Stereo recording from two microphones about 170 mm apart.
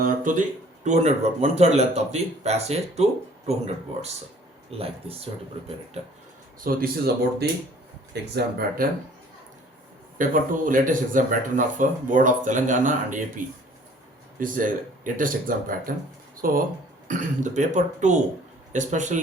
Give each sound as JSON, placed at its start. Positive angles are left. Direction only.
{"t": 0.0, "sound": "speech", "side_deg": -50}
{"t": 0.9, "sound": "speech", "side_deg": -40}
{"t": 4.7, "sound": "speech", "side_deg": -35}
{"t": 6.6, "sound": "speech", "side_deg": -60}
{"t": 10.2, "sound": "speech", "side_deg": -50}